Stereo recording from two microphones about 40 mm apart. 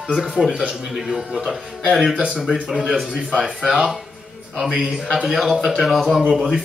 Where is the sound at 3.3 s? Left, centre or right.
Centre.